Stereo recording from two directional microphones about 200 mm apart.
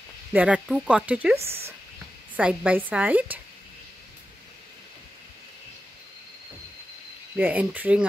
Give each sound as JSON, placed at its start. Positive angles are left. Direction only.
{"t": 0.3, "sound": "speech", "side_deg": -5}
{"t": 1.4, "sound": "speech", "side_deg": -30}
{"t": 2.3, "sound": "speech", "side_deg": -5}
{"t": 7.3, "sound": "speech", "side_deg": -10}